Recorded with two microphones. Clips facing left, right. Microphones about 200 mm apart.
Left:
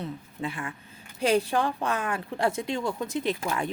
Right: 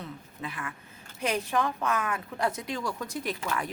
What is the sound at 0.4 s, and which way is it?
Speech, 25° left (ahead or behind).